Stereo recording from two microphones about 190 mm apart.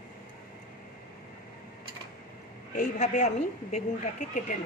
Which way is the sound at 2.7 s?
40° left (ahead or behind).